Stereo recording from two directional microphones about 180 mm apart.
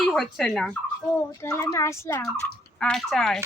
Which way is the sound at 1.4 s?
15° left (ahead or behind).